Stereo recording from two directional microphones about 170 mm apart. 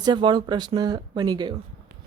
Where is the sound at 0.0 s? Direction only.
25° right (ahead or behind).